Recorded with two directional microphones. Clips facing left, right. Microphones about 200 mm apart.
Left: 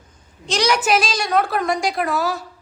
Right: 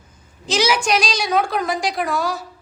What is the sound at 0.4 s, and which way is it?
A woman's voice, 5° right (ahead or behind).